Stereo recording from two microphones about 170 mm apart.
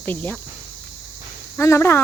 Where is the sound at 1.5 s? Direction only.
15° left (ahead or behind).